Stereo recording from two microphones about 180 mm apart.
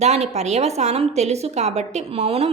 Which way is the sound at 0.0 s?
40° right (ahead or behind).